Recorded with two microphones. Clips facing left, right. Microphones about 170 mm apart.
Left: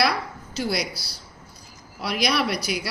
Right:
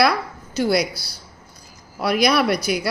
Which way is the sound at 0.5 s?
55° right (ahead or behind).